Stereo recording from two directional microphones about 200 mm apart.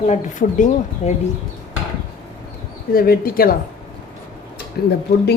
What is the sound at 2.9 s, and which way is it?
Speech, 50° left (ahead or behind).